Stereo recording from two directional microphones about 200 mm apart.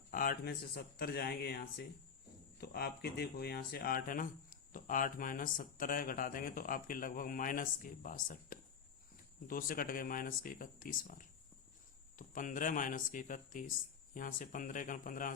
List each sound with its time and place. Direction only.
0.1 s speech: 45° left (ahead or behind)